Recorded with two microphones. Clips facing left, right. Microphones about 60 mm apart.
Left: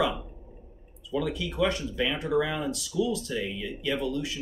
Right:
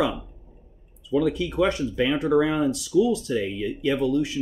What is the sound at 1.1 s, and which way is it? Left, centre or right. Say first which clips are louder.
Speech: right 7 dB; right.